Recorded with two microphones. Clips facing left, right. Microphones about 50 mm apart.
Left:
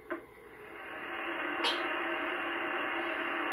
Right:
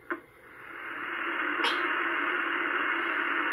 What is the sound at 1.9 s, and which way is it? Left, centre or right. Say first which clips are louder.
Music: right 5 dB; right.